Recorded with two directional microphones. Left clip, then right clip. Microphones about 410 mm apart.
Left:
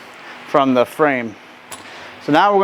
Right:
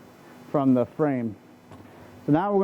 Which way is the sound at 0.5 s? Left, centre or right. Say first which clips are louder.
Left 9 dB; centre.